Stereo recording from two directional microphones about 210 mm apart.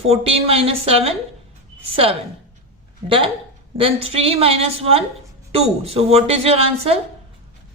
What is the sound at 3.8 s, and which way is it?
Speech, 25° right (ahead or behind).